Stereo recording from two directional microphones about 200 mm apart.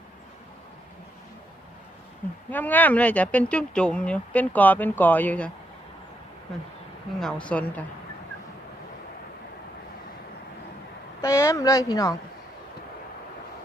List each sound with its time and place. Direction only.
2.5 s speech: 10° left (ahead or behind)
7.2 s speech: 5° left (ahead or behind)
11.2 s speech: 15° left (ahead or behind)